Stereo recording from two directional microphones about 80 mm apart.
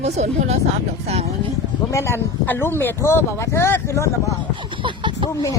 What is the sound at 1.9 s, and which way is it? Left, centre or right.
Speech, left.